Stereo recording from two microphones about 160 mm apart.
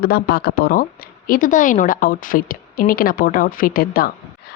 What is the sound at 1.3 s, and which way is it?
A woman's voice, 60° left (ahead or behind).